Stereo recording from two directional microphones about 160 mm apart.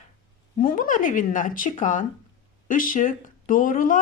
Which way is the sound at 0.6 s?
60° left (ahead or behind).